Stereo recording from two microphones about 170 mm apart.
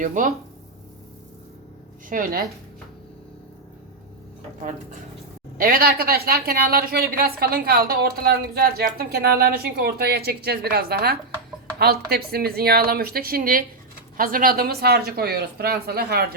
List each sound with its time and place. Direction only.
0.0 s speech: 50° right (ahead or behind)
2.0 s speech: 55° right (ahead or behind)
5.5 s a woman's voice: 55° right (ahead or behind)